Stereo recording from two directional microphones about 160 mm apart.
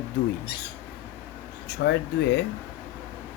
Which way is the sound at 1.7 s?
90° left.